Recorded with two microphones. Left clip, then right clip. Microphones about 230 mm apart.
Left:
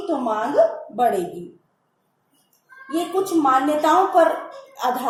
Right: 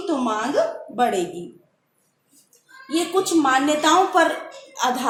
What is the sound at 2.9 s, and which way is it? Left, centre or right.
Speech, right.